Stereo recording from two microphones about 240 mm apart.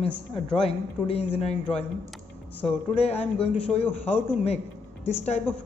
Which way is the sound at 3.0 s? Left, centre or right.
Left.